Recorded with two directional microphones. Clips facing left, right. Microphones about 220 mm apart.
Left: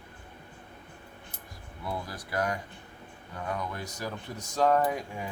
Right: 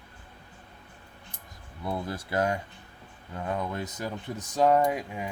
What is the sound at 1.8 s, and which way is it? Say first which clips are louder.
Speech: right 4 dB; 25° right (ahead or behind).